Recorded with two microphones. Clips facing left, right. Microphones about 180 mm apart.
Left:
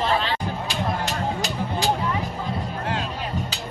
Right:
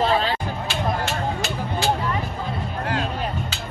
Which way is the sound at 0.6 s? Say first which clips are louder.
Right 3 dB; 40° left (ahead or behind).